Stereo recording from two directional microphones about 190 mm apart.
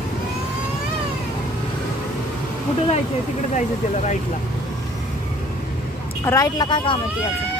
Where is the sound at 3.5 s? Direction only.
40° left (ahead or behind).